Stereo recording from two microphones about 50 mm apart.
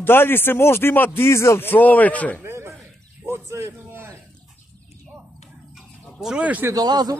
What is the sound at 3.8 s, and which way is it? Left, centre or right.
Speech, right.